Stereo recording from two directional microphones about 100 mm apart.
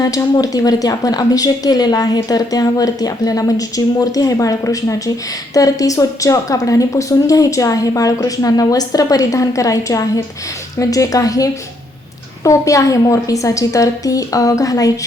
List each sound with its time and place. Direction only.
0.0 s speech: 40° left (ahead or behind)